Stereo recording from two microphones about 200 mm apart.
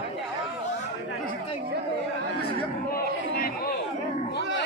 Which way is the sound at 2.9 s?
50° left (ahead or behind).